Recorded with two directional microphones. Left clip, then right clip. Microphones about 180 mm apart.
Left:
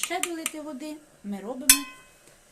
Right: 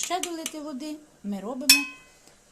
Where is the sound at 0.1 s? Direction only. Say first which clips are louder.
Right 1 dB; 60° right (ahead or behind).